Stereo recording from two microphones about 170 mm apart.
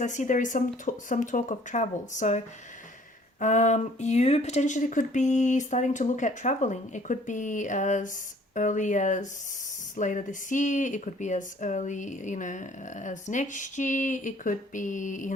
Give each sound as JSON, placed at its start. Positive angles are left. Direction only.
{"t": 0.0, "sound": "speech", "side_deg": 45}
{"t": 3.4, "sound": "speech", "side_deg": 45}